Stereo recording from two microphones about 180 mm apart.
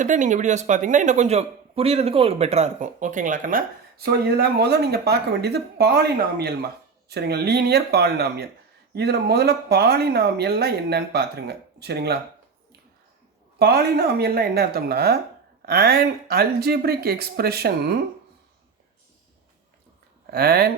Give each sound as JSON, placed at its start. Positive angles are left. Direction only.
{"t": 0.0, "sound": "a man's voice", "side_deg": -45}
{"t": 13.6, "sound": "speech", "side_deg": -60}
{"t": 20.3, "sound": "speech", "side_deg": -60}